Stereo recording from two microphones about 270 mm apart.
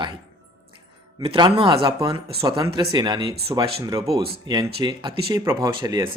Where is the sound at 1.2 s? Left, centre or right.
Centre.